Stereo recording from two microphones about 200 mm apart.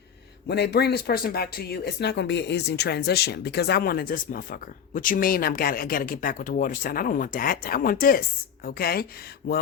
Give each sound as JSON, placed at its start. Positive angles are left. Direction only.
{"t": 0.4, "sound": "speech", "side_deg": 55}
{"t": 9.4, "sound": "speech", "side_deg": 65}